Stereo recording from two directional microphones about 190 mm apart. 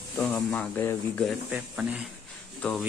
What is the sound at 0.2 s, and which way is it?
Speech, 5° left (ahead or behind).